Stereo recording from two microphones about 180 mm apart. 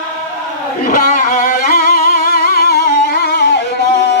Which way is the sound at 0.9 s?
50° left (ahead or behind).